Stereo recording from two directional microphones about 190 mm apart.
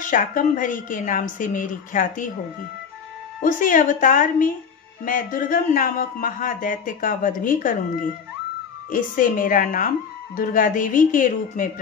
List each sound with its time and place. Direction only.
0.0 s speech: 45° left (ahead or behind)
3.3 s speech: 45° left (ahead or behind)